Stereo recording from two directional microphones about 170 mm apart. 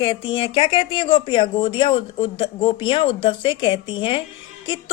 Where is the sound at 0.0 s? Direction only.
30° left (ahead or behind).